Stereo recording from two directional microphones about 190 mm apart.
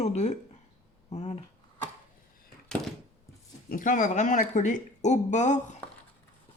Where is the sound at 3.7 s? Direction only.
45° left (ahead or behind).